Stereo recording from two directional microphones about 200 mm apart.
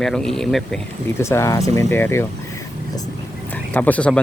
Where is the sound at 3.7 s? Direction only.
5° left (ahead or behind).